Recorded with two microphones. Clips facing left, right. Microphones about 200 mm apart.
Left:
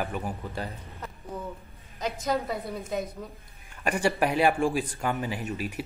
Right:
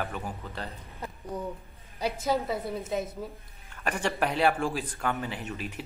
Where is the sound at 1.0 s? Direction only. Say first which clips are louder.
Right 3 dB; 15° right (ahead or behind).